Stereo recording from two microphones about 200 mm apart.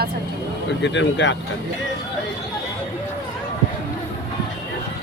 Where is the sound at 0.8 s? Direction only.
65° left (ahead or behind).